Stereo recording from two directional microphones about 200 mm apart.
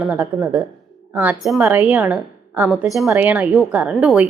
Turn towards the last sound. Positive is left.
turn(degrees=-5)  # may be behind; listen again after turning